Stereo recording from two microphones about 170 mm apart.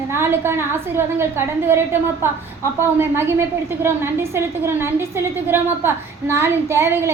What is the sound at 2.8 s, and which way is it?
Speech, 15° right (ahead or behind).